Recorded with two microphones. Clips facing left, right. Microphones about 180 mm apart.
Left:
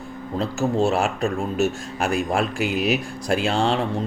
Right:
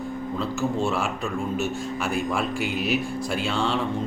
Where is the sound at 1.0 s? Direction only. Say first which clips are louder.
Left 4 dB; 90° left.